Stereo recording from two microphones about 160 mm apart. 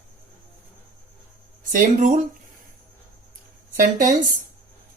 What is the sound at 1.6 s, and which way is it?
Speech, 55° right (ahead or behind).